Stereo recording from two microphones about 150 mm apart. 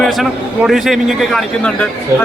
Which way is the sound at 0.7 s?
Centre (ahead or behind).